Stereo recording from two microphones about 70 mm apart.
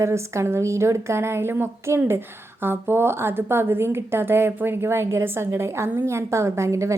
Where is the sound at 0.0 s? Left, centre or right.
Right.